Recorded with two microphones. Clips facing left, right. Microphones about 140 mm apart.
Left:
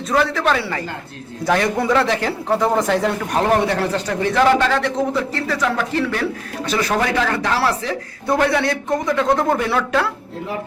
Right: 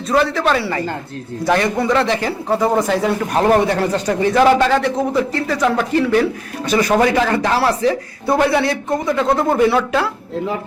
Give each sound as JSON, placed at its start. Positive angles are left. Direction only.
{"t": 0.1, "sound": "a man's voice", "side_deg": 0}